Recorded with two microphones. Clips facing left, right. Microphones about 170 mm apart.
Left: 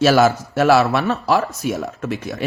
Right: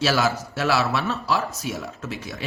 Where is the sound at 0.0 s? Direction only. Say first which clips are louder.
Left 8 dB; 50° left (ahead or behind).